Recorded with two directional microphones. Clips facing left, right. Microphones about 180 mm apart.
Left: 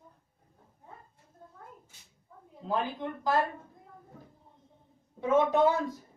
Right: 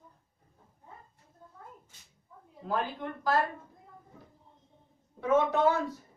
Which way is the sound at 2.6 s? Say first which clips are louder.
Left 1 dB; 20° left (ahead or behind).